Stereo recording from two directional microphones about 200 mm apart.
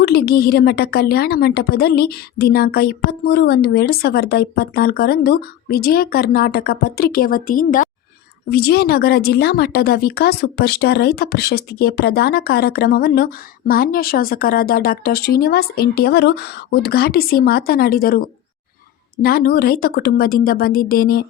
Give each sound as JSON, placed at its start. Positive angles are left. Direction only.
{"t": 0.0, "sound": "a woman's voice", "side_deg": 50}